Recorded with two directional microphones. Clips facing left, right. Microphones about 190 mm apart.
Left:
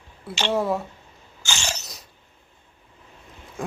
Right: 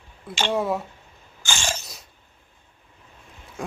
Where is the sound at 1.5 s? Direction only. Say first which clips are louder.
Right 2 dB; 50° right (ahead or behind).